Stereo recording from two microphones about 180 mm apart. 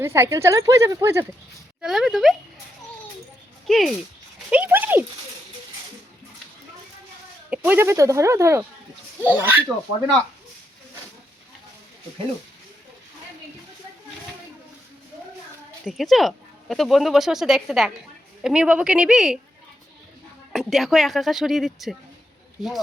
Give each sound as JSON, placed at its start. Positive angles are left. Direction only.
{"t": 0.0, "sound": "a woman's voice", "side_deg": -15}
{"t": 1.8, "sound": "speech", "side_deg": -5}
{"t": 3.7, "sound": "a woman's voice", "side_deg": 0}
{"t": 7.5, "sound": "a woman's voice", "side_deg": -10}
{"t": 15.9, "sound": "speech", "side_deg": 0}
{"t": 20.5, "sound": "speech", "side_deg": 0}